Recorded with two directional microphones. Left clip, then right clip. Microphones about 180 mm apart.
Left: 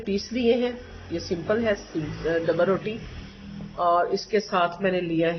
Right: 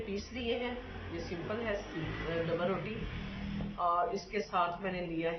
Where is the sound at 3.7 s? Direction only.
60° left (ahead or behind).